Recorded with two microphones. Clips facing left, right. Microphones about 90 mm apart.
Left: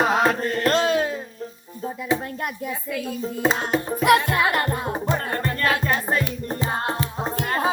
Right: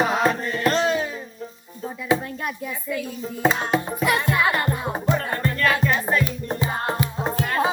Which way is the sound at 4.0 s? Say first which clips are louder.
Left 6 dB; 60° left (ahead or behind).